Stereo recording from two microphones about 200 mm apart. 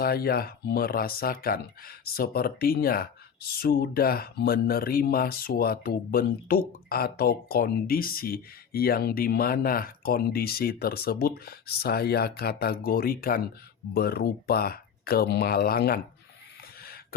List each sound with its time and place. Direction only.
0.0 s speech: 50° left (ahead or behind)